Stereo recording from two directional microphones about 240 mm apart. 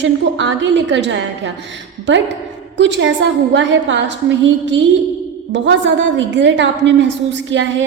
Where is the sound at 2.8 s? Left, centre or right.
Right.